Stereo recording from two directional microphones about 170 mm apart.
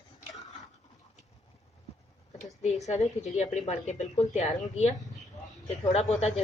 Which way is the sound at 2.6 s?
40° left (ahead or behind).